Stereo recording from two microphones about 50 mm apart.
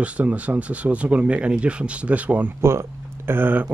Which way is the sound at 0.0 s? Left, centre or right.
Right.